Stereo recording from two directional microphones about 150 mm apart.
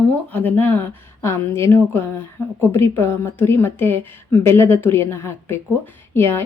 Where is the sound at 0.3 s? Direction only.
10° left (ahead or behind).